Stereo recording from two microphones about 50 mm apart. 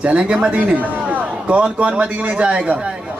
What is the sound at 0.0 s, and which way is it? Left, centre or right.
Speech, right.